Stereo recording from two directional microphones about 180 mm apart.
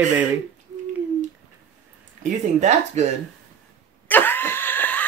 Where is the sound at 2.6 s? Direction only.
40° right (ahead or behind).